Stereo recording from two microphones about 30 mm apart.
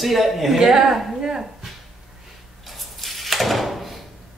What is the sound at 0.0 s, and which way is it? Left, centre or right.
Speech, centre.